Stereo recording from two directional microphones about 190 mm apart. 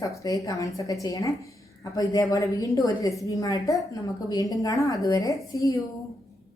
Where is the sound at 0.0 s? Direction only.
15° left (ahead or behind).